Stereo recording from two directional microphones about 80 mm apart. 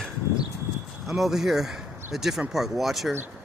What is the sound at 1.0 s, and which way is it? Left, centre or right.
Speech, centre.